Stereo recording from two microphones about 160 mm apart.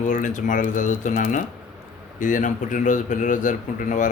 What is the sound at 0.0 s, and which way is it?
A man's voice, 50° left (ahead or behind).